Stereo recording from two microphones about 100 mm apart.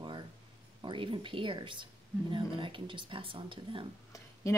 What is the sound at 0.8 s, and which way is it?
Speech, 55° right (ahead or behind).